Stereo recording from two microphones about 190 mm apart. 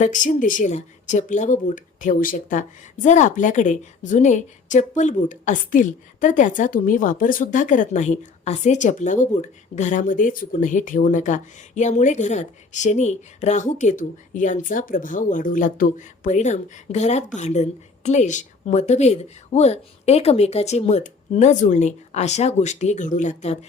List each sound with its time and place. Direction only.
0.0 s speech: 40° left (ahead or behind)